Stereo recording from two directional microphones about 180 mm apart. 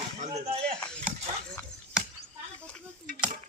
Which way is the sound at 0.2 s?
35° right (ahead or behind).